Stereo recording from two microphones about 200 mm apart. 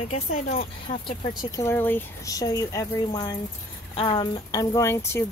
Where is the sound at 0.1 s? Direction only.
40° left (ahead or behind).